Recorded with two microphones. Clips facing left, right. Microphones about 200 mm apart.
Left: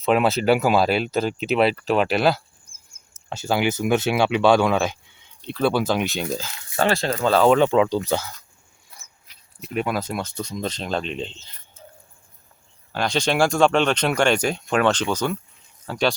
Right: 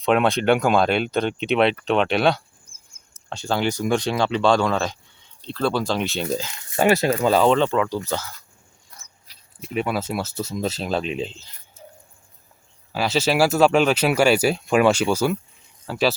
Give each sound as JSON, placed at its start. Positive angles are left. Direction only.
{"t": 0.0, "sound": "speech", "side_deg": 5}
{"t": 6.7, "sound": "speech", "side_deg": -15}
{"t": 7.4, "sound": "speech", "side_deg": 10}
{"t": 8.9, "sound": "cricket", "side_deg": 5}
{"t": 9.3, "sound": "a sound", "side_deg": -35}
{"t": 9.6, "sound": "speech", "side_deg": -5}
{"t": 12.9, "sound": "speech", "side_deg": -5}